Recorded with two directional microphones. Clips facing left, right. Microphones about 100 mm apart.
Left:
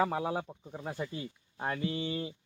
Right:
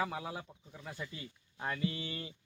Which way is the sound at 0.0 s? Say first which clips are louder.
Left 7 dB; 45° left (ahead or behind).